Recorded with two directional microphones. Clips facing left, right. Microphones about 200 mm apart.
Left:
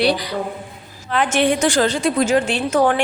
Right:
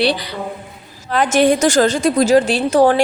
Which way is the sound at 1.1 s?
40° right (ahead or behind).